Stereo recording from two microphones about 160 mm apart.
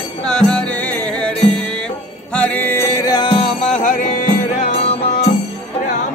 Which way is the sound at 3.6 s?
55° left (ahead or behind).